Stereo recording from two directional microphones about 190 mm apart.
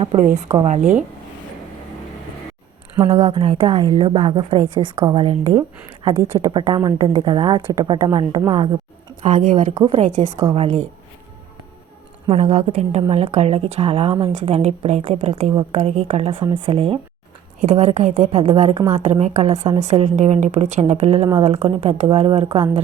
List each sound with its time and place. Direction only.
0.0 s a woman's voice: 30° right (ahead or behind)
3.2 s a woman's voice: 25° right (ahead or behind)
9.2 s a woman's voice: 40° right (ahead or behind)
12.3 s a woman's voice: 35° right (ahead or behind)